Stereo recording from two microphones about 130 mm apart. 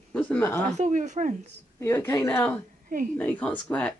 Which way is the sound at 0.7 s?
70° right (ahead or behind).